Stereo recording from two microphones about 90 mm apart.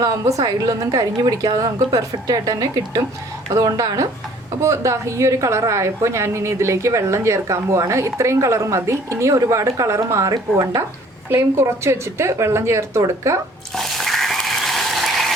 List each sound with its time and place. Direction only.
0.0 s a woman's voice: 40° right (ahead or behind)
13.7 s ratchet: 5° left (ahead or behind)